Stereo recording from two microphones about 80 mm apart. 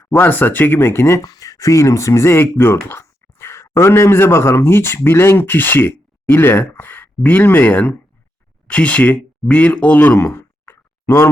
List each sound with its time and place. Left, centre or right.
0.0 s speech: left
1.3 s speech: left; by 10.2 s centre
10.2 s a sound: left